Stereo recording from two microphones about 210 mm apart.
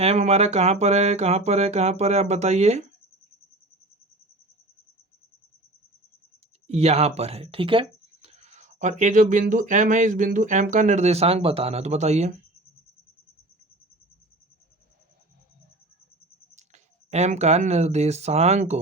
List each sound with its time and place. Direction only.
0.0 s speech: 30° right (ahead or behind)
6.7 s speech: 30° right (ahead or behind)
16.6 s speech: 30° right (ahead or behind)